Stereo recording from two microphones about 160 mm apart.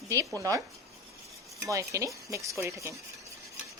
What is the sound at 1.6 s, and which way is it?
Speech, 20° right (ahead or behind).